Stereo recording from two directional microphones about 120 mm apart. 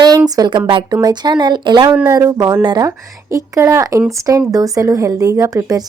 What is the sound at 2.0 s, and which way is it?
Speech, 25° right (ahead or behind).